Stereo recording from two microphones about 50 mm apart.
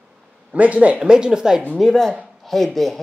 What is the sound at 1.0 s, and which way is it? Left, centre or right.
Speech, centre.